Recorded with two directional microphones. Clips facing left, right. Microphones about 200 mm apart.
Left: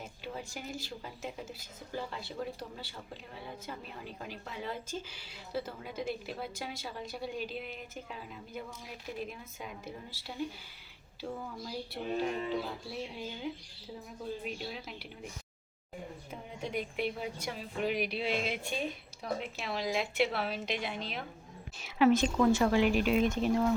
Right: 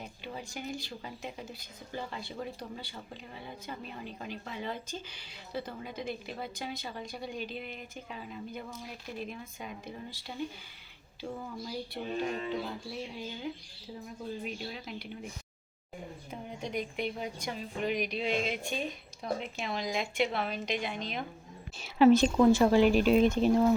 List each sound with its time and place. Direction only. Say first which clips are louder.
0.3 s speech: right 3 dB; 5° left (ahead or behind)
16.3 s speech: right 1 dB; 5° left (ahead or behind)
21.8 s speech: right 4 dB; 30° right (ahead or behind)